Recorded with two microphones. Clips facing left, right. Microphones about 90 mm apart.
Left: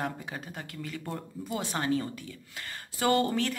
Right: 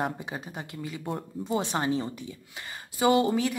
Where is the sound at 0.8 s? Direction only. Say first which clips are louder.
Right 3 dB; 15° right (ahead or behind).